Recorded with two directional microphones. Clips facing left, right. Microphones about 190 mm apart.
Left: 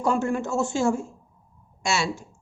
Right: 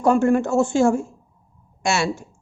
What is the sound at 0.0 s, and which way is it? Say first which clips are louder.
Speech: right 7 dB; 55° right (ahead or behind).